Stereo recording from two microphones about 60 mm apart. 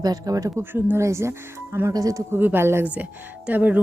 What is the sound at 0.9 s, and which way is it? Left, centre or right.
Speech, right.